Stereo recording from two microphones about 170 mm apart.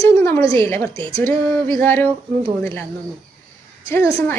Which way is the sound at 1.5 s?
10° left (ahead or behind).